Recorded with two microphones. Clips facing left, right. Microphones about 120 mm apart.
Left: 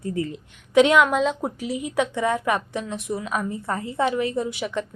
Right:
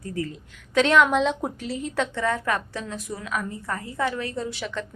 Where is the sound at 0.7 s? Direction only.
10° left (ahead or behind).